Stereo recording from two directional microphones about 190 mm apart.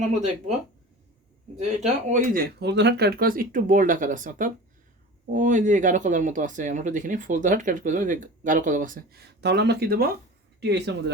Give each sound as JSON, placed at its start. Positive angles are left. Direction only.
{"t": 1.6, "sound": "speech", "side_deg": -40}
{"t": 10.6, "sound": "speech", "side_deg": -65}